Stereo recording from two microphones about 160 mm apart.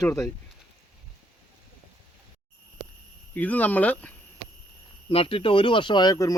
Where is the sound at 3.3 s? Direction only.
10° left (ahead or behind).